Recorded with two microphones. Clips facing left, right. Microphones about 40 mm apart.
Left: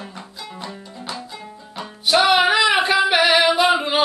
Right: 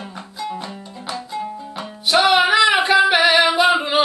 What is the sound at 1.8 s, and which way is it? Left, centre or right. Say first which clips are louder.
Music: even; centre.